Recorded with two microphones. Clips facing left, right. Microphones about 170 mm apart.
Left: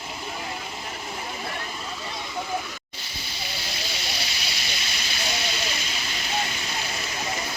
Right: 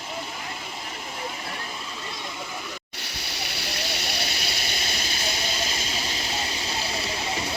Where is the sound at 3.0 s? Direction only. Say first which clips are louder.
Right 1 dB; 70° right (ahead or behind); by 4.7 s 50° right (ahead or behind).